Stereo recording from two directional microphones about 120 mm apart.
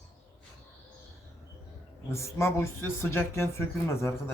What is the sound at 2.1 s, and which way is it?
Speech, 25° left (ahead or behind).